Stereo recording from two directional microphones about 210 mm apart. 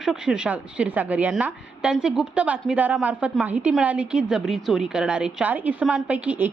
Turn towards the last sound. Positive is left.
turn(degrees=-5)  # may be behind; listen again after turning